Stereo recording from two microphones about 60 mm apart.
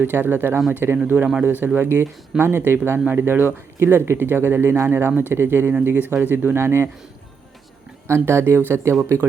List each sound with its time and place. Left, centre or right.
0.0 s speech: right
8.0 s speech: right